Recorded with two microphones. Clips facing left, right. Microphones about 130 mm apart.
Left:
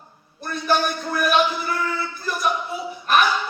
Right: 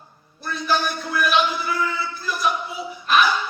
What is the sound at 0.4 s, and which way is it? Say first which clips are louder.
A man's voice: left 2 dB; 50° left (ahead or behind).